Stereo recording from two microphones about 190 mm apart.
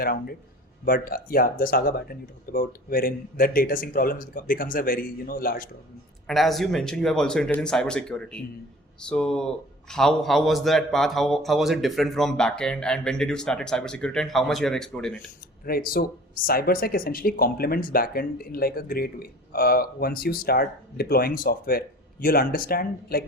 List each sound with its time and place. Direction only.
0.0 s speech: 50° left (ahead or behind)
6.2 s a man's voice: centre (ahead or behind)
15.6 s speech: 50° left (ahead or behind)